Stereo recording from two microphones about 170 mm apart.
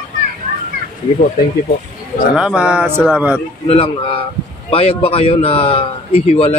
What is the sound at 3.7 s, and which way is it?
A man's voice, 35° left (ahead or behind).